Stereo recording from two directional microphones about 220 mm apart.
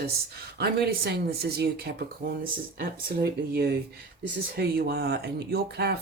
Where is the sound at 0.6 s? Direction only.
45° right (ahead or behind).